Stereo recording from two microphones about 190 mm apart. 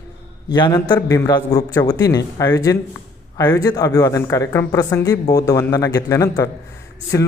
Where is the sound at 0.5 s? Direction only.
20° left (ahead or behind).